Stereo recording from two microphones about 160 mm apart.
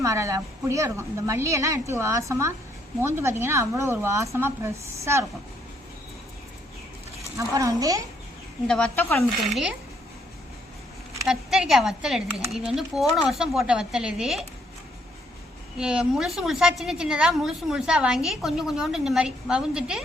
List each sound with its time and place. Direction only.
0.0 s a woman's voice: 20° right (ahead or behind)
7.3 s a woman's voice: 20° right (ahead or behind)
8.6 s a woman's voice: 5° left (ahead or behind)
11.3 s a woman's voice: 5° right (ahead or behind)
15.8 s a woman's voice: 5° right (ahead or behind)